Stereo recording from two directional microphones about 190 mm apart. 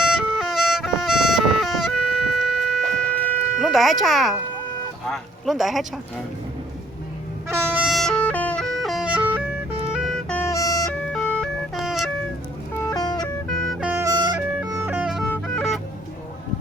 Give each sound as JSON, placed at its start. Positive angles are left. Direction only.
{"t": 0.0, "sound": "music", "side_deg": -5}
{"t": 5.0, "sound": "speech", "side_deg": 0}
{"t": 7.4, "sound": "music", "side_deg": -10}
{"t": 10.8, "sound": "vehicle", "side_deg": 5}
{"t": 12.9, "sound": "music", "side_deg": 20}
{"t": 13.2, "sound": "music", "side_deg": 0}
{"t": 13.9, "sound": "music", "side_deg": -15}
{"t": 15.3, "sound": "music", "side_deg": 5}